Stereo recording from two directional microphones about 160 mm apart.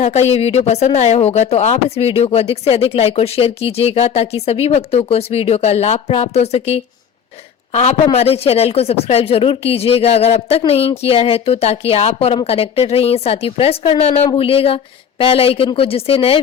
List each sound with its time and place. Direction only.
0.0 s speech: 45° left (ahead or behind)